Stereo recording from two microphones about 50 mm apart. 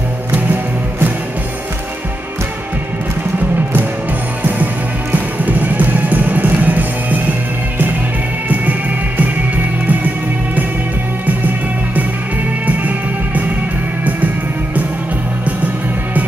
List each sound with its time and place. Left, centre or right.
5.1 s music: right
9.8 s music: right